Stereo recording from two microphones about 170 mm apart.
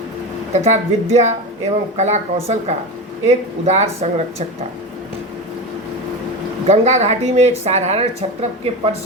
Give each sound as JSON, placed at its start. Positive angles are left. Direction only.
{"t": 0.5, "sound": "speech", "side_deg": -40}
{"t": 6.7, "sound": "speech", "side_deg": -40}